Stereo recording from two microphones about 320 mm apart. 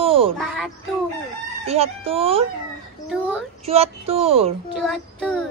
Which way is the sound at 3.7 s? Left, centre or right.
Centre.